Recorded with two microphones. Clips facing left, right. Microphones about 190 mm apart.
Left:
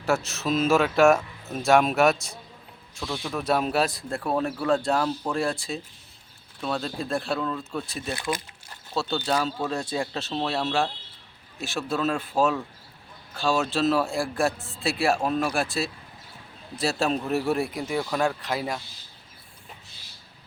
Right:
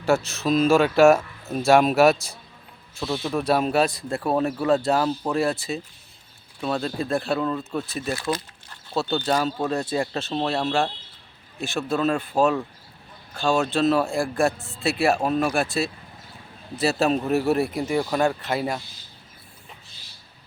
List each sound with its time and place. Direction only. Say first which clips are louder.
0.0 s speech: right 4 dB; centre (ahead or behind)
3.0 s a man's voice: right 5 dB; 15° right (ahead or behind)
3.3 s speech: right 3 dB; centre (ahead or behind)
8.1 s speech: right 3 dB; 15° left (ahead or behind)
9.0 s speech: right 3 dB; 5° right (ahead or behind)